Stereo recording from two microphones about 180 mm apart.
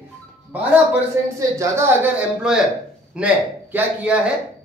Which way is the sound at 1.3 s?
15° right (ahead or behind).